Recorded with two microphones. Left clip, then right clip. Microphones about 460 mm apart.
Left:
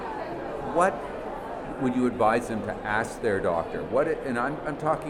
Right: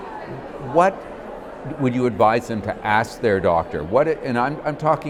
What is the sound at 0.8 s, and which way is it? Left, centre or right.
A man's voice, right.